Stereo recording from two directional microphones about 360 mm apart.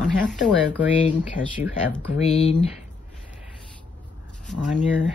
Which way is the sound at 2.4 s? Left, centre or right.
Centre.